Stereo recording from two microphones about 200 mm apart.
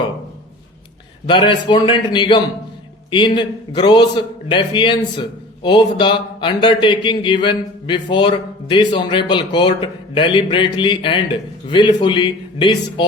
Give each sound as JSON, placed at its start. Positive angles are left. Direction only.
{"t": 1.3, "sound": "speech", "side_deg": 25}